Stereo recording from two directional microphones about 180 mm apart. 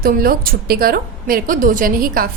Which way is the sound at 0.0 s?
55° right (ahead or behind).